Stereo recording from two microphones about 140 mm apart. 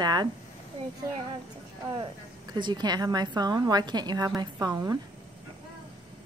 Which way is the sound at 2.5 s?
30° right (ahead or behind).